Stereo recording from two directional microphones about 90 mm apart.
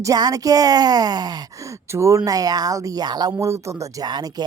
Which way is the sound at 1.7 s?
30° right (ahead or behind).